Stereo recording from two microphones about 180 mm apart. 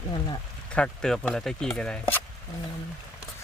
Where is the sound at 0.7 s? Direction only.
5° left (ahead or behind).